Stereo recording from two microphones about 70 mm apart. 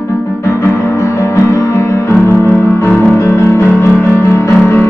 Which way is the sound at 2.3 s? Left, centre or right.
Left.